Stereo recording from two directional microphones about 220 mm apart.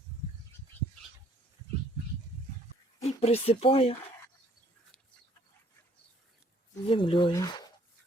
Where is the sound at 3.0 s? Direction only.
25° left (ahead or behind).